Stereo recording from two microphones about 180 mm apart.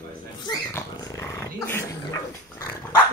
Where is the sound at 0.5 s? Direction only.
20° left (ahead or behind).